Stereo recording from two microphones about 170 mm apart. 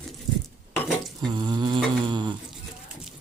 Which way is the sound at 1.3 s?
25° right (ahead or behind).